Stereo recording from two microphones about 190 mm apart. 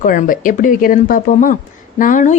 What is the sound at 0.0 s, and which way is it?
A woman's voice, 45° left (ahead or behind).